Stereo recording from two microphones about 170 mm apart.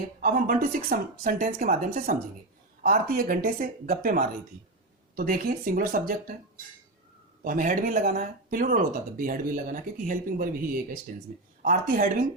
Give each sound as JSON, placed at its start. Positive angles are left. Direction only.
{"t": 0.2, "sound": "speech", "side_deg": -60}
{"t": 7.4, "sound": "speech", "side_deg": -55}